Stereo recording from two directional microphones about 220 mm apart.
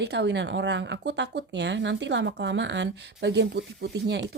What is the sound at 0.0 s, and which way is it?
Speech, 50° right (ahead or behind).